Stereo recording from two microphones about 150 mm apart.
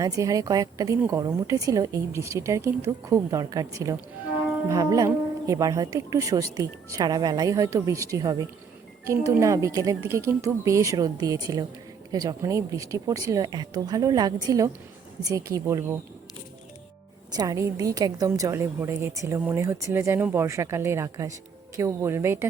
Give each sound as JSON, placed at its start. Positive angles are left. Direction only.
{"t": 0.0, "sound": "a woman's voice", "side_deg": -20}
{"t": 17.3, "sound": "a woman's voice", "side_deg": -20}